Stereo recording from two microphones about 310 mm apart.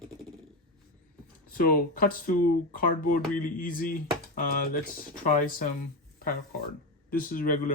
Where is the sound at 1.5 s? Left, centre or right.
Left.